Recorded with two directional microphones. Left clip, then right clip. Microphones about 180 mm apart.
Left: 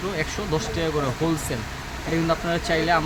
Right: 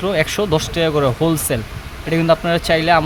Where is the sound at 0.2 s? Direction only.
55° right (ahead or behind).